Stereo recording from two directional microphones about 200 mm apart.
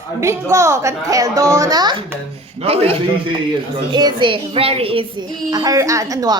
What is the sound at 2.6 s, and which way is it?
Speech, 30° right (ahead or behind).